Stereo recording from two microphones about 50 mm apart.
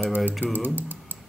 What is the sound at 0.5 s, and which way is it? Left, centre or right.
Speech, right.